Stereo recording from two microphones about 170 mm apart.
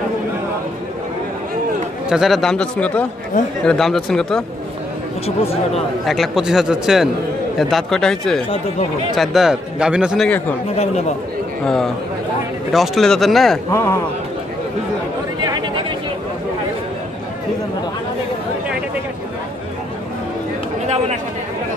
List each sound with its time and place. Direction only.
2.0 s a man's voice: centre (ahead or behind)
5.2 s speech: 35° left (ahead or behind)
6.0 s a man's voice: centre (ahead or behind)
10.8 s speech: 40° left (ahead or behind)
11.6 s a man's voice: centre (ahead or behind)
13.7 s speech: 15° left (ahead or behind)
20.8 s speech: 40° right (ahead or behind)